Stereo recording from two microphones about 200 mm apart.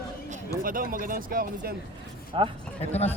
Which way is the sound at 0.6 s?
45° right (ahead or behind).